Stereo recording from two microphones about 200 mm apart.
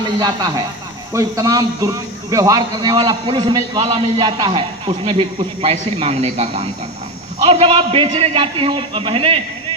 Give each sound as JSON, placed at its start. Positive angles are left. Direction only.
{"t": 0.0, "sound": "a man's voice", "side_deg": -20}